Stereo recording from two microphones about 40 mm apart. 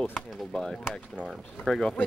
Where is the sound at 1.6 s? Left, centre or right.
Centre.